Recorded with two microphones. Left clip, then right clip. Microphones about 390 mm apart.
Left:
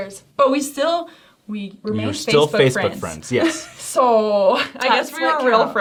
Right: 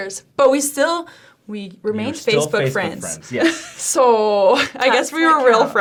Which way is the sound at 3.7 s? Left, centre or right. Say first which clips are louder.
Right 1 dB; right.